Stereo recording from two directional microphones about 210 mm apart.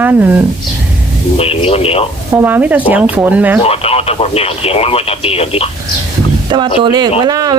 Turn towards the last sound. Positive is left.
turn(degrees=-20)  # may be behind; listen again after turning